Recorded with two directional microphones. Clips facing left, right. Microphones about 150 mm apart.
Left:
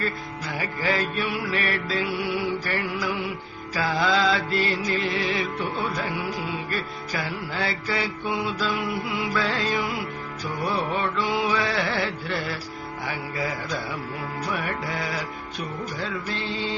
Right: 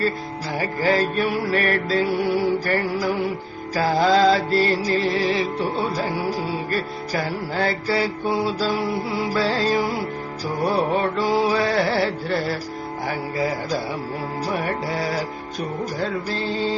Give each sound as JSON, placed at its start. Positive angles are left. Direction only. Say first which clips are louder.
{"t": 0.5, "sound": "music", "louder": "right 6 dB", "side_deg": -40}